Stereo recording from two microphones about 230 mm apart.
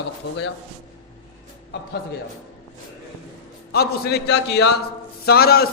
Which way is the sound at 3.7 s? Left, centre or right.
Left.